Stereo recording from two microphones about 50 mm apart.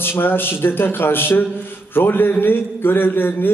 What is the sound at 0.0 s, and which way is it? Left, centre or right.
A man's voice, left.